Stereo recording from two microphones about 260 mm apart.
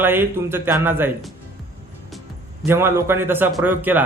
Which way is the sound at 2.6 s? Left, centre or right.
Centre.